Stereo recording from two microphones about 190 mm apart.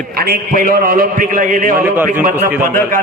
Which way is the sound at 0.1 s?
50° right (ahead or behind).